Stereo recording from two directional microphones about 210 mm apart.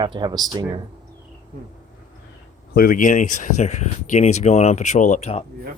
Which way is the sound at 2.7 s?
40° left (ahead or behind).